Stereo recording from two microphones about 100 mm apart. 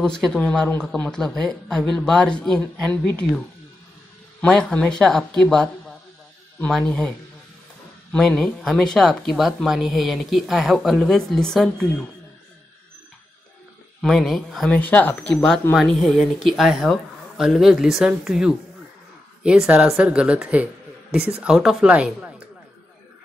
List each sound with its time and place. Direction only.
0.0 s speech: 5° left (ahead or behind)
14.0 s speech: centre (ahead or behind)
14.7 s a woman's voice: 15° left (ahead or behind); by 22.3 s 10° right (ahead or behind)